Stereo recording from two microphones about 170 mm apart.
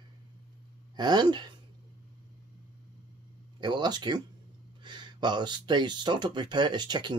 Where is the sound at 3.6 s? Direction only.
25° right (ahead or behind).